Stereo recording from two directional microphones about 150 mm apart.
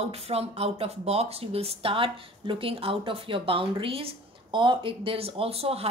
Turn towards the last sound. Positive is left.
turn(degrees=-40)  # may be behind; listen again after turning